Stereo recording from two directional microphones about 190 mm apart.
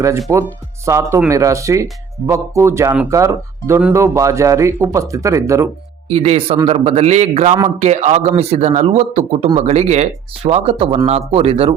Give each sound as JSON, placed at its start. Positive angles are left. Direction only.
{"t": 0.0, "sound": "speech", "side_deg": -15}
{"t": 6.1, "sound": "speech", "side_deg": -35}